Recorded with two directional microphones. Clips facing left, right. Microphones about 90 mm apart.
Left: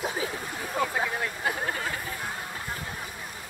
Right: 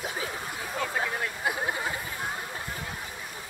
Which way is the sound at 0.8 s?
Centre (ahead or behind).